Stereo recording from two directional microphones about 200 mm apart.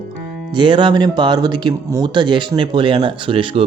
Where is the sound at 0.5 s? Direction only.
25° right (ahead or behind).